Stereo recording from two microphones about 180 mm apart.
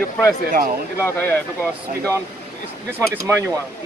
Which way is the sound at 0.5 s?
50° right (ahead or behind).